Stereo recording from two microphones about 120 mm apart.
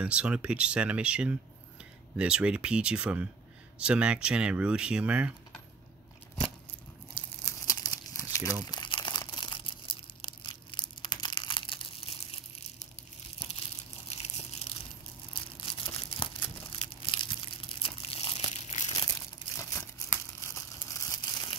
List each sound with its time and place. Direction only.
0.0 s speech: 10° right (ahead or behind)
7.2 s crumpling: 25° left (ahead or behind)
8.6 s crumpling: 40° left (ahead or behind)
9.3 s tearing: 40° left (ahead or behind)
13.6 s a sound: 55° left (ahead or behind)
15.3 s a sound: 45° left (ahead or behind)
18.5 s crumpling: 75° left (ahead or behind)
18.9 s crumpling: 30° left (ahead or behind)